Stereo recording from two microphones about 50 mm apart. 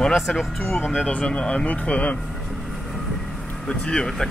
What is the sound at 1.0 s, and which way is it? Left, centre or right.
Speech, left.